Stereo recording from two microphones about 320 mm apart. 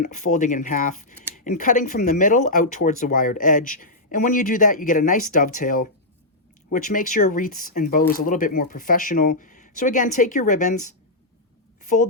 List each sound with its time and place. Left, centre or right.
0.0 s speech: left